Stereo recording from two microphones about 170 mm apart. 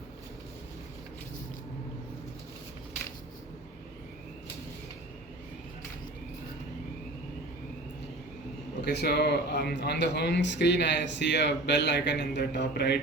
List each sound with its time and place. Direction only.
8.8 s speech: 75° left (ahead or behind)